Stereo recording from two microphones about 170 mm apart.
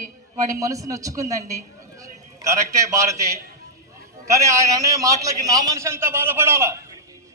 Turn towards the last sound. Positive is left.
turn(degrees=-15)  # may be behind; listen again after turning